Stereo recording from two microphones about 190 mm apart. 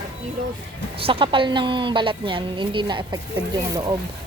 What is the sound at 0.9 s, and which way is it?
A woman's voice, 30° right (ahead or behind).